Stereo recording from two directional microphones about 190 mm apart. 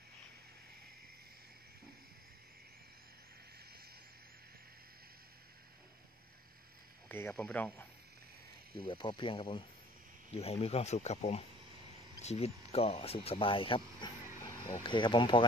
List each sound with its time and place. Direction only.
7.1 s speech: 10° left (ahead or behind)
8.7 s speech: 25° left (ahead or behind)
14.4 s speech: 15° left (ahead or behind)